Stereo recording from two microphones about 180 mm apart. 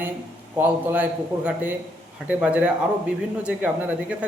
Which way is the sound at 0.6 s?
10° right (ahead or behind).